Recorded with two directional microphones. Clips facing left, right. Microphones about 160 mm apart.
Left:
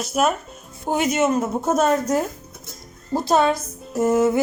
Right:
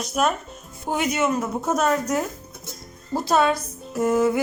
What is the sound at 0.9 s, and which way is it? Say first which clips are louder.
A woman's voice: left 3 dB; 25° left (ahead or behind).